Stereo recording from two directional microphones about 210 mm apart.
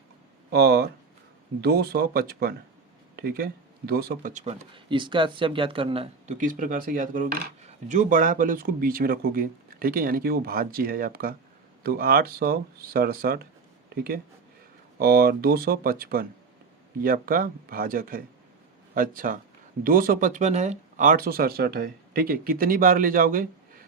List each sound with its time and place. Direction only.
0.5 s speech: 50° right (ahead or behind)
4.7 s speech: 25° right (ahead or behind); by 23.8 s 45° right (ahead or behind)